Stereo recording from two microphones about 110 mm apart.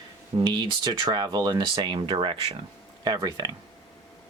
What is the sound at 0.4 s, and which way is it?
Speech, 40° right (ahead or behind).